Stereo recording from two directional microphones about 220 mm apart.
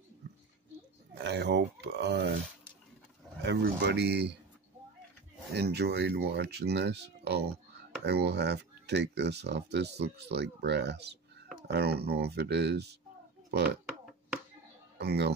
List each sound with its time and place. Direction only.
1.1 s speech: 50° right (ahead or behind)
3.4 s speech: 50° right (ahead or behind)
5.5 s speech: 50° right (ahead or behind)
15.0 s speech: 50° right (ahead or behind)